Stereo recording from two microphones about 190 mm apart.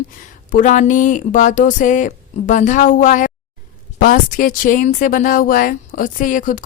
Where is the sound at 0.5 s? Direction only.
40° left (ahead or behind).